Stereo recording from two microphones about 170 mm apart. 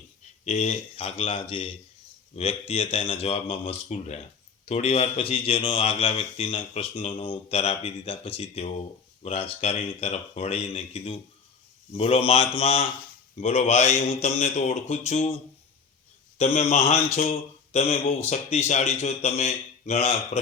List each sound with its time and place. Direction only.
0.4 s speech: 40° left (ahead or behind)
16.4 s speech: 40° left (ahead or behind)